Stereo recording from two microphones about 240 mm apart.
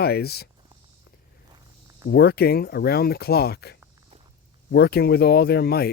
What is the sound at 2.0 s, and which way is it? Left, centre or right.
Speech, left.